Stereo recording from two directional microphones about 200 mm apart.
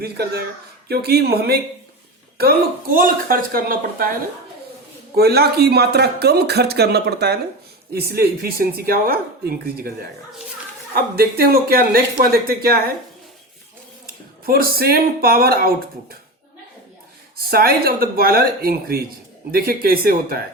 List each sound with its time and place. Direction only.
0.0 s speech: 50° right (ahead or behind)
5.1 s speech: 50° right (ahead or behind)
14.4 s speech: 50° right (ahead or behind)
17.3 s speech: 50° right (ahead or behind)